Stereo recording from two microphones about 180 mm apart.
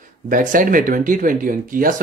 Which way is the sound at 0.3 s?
50° right (ahead or behind).